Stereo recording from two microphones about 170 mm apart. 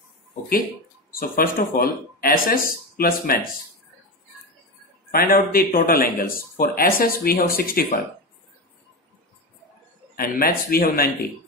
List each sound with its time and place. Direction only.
1.3 s speech: 60° left (ahead or behind)
5.1 s speech: 60° left (ahead or behind)
10.1 s speech: 60° left (ahead or behind)